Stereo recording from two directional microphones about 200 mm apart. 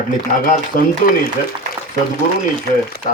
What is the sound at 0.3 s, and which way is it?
Speech, 40° left (ahead or behind).